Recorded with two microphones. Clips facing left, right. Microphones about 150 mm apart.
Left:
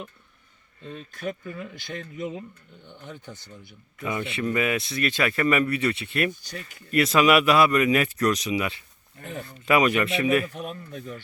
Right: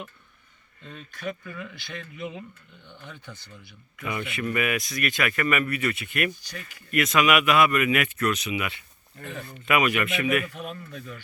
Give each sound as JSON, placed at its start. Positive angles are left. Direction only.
{"t": 1.5, "sound": "a man's voice", "side_deg": 35}
{"t": 3.9, "sound": "speech", "side_deg": 25}